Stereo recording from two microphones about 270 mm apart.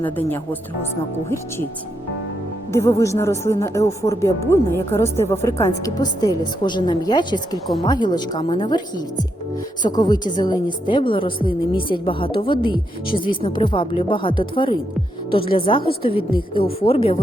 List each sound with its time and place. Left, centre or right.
0.0 s a woman's voice: centre
2.7 s a woman's voice: centre
16.8 s a woman's voice: left